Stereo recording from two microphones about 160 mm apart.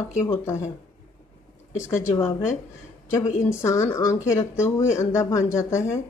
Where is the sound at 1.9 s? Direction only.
15° left (ahead or behind).